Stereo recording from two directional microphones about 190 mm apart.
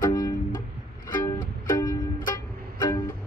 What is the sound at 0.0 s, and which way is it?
Music, 20° left (ahead or behind).